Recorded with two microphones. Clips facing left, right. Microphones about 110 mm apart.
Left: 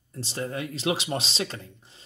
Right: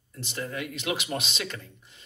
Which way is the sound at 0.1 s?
30° left (ahead or behind).